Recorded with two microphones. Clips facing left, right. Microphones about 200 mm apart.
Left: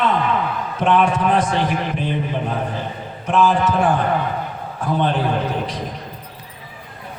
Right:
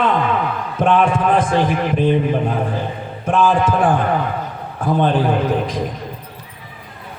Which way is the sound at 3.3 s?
50° right (ahead or behind).